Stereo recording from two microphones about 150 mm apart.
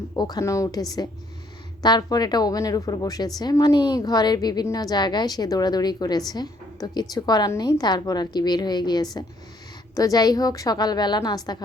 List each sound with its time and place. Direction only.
0.2 s a woman's voice: 25° left (ahead or behind)